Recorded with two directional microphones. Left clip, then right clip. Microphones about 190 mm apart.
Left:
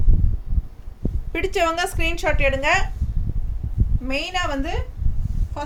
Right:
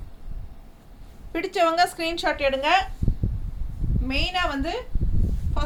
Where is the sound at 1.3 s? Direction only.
30° left (ahead or behind).